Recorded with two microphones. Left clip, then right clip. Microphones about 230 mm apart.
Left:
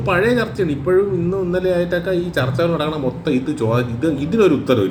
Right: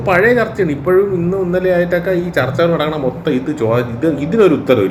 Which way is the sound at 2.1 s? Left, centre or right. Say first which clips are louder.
Right 4 dB; centre.